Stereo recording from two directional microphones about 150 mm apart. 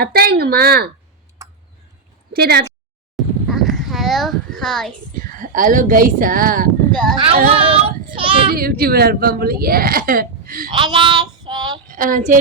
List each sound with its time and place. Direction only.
0.0 s speech: 90° right
1.4 s tick: 20° right (ahead or behind)
2.3 s speech: 90° right
3.2 s a sound: centre (ahead or behind)
5.2 s speech: 65° right (ahead or behind)
6.9 s speech: centre (ahead or behind)
7.7 s child singing: 35° right (ahead or behind)
8.5 s a woman's voice: 85° right
10.7 s child singing: 30° right (ahead or behind)
11.9 s speech: 65° right (ahead or behind)